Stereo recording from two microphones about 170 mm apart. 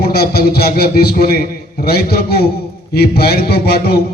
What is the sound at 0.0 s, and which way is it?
A man's voice, 70° left (ahead or behind).